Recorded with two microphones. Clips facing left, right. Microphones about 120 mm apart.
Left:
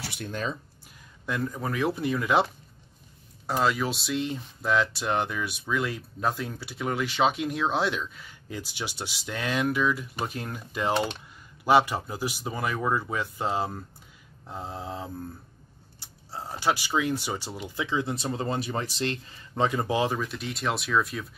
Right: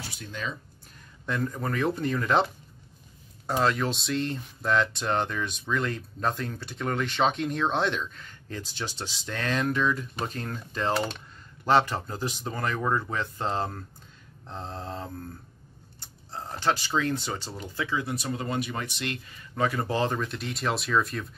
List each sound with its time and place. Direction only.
0.0 s a sound: 70° left (ahead or behind)
0.3 s speech: 40° left (ahead or behind)
1.2 s speech: 5° left (ahead or behind)
3.4 s speech: 5° left (ahead or behind)
10.9 s speech: 20° left (ahead or behind)
11.6 s speech: 10° left (ahead or behind)